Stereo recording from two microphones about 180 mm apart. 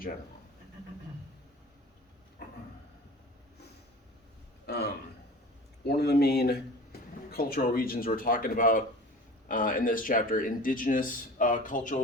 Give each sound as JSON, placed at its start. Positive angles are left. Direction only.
{"t": 4.6, "sound": "speech", "side_deg": 65}